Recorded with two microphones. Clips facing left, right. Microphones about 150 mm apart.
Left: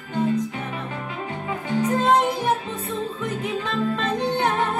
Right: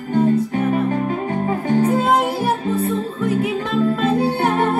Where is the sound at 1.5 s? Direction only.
40° right (ahead or behind).